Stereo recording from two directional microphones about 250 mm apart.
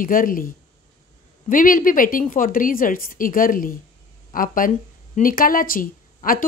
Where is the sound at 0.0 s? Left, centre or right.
Left.